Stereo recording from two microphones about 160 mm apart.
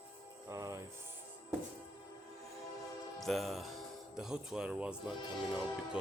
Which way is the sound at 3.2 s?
Centre (ahead or behind).